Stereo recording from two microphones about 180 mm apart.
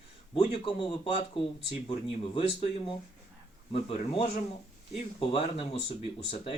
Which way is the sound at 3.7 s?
30° left (ahead or behind).